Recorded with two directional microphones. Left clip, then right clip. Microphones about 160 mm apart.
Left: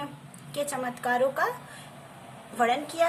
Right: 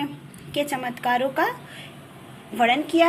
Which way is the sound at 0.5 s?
10° right (ahead or behind).